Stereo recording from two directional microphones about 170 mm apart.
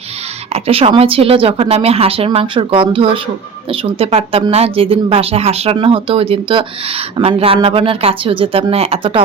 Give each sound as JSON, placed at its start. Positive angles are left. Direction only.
{"t": 0.5, "sound": "a woman's voice", "side_deg": -35}